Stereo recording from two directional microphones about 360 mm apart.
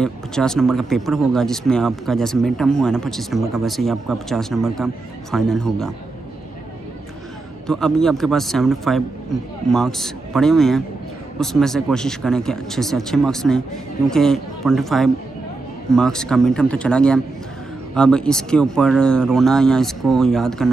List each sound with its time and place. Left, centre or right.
0.0 s speech: centre
7.6 s speech: centre